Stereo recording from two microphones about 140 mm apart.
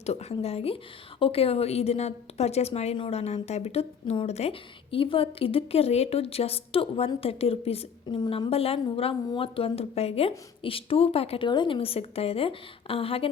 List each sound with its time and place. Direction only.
0.0 s a woman's voice: 50° left (ahead or behind)